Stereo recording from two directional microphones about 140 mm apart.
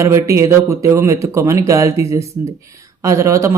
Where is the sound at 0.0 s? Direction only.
20° right (ahead or behind).